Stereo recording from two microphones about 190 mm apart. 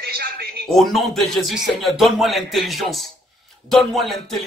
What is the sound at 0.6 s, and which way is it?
A man's voice, centre (ahead or behind).